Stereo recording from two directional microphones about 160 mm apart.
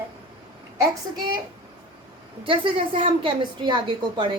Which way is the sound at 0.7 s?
20° right (ahead or behind).